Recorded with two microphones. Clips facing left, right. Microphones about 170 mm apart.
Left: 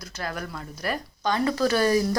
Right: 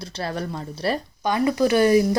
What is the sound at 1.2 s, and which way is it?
Speech, 15° right (ahead or behind).